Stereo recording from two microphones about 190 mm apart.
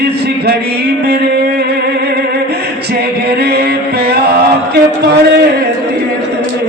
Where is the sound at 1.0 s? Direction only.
60° right (ahead or behind).